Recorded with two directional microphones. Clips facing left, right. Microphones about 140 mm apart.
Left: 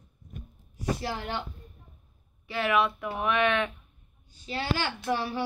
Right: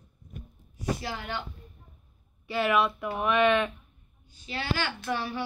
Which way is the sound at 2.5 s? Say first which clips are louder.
Right 1 dB; centre (ahead or behind).